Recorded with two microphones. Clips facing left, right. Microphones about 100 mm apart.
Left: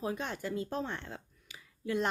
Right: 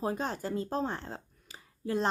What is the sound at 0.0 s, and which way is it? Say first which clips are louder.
Speech: right 3 dB; 35° right (ahead or behind).